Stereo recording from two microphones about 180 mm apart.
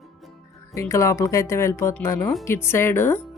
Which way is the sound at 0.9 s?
15° left (ahead or behind).